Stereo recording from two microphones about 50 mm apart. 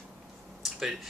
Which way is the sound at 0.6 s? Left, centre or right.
Centre.